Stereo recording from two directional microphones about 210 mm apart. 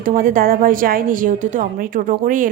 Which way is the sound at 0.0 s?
40° right (ahead or behind).